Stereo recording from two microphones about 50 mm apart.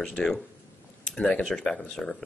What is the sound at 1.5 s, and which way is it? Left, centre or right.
Speech, centre.